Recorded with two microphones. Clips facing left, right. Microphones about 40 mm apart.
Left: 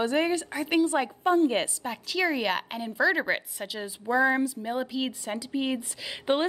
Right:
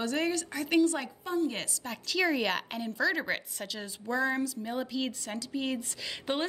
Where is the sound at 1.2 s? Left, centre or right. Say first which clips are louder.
Left 9 dB; left.